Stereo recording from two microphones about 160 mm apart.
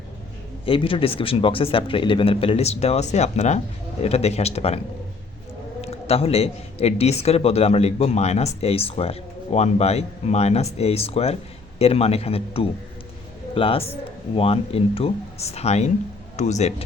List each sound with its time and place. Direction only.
0.6 s speech: 35° left (ahead or behind)
5.8 s speech: 40° left (ahead or behind)